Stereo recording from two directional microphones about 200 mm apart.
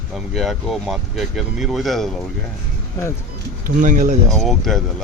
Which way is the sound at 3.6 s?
40° right (ahead or behind).